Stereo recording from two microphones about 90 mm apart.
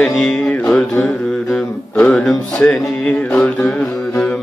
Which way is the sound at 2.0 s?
10° left (ahead or behind).